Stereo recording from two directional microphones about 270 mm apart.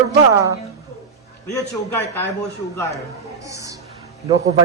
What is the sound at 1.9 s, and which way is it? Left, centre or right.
Speech, centre.